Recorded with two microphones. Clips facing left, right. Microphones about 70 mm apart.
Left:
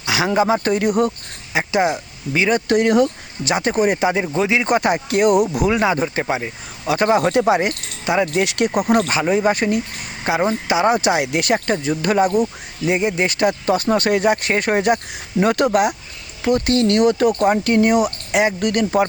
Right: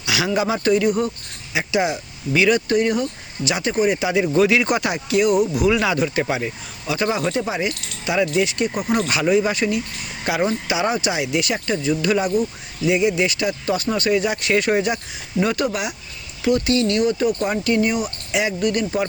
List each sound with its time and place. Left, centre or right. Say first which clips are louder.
0.0 s a sound: left 2 dB; left
0.3 s speech: left 1 dB; left
1.5 s speech: left 3 dB; left
2.6 s speech: left 4 dB; left
3.4 s speech: left 2 dB; left
4.4 s speech: right 5 dB; left
4.7 s speech: left 3 dB; left
5.6 s speech: left 1 dB; left
6.2 s speech: left 1 dB; centre
6.8 s speech: left 5 dB; left
7.7 s speech: left 3 dB; left
9.0 s speech: left 1 dB; left
10.3 s speech: left 3 dB; left
10.7 s speech: left 5 dB; left